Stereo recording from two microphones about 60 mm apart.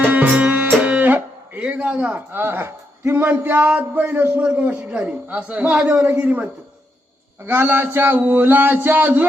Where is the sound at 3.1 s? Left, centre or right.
Right.